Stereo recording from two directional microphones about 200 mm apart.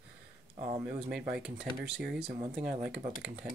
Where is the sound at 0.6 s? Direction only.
30° right (ahead or behind).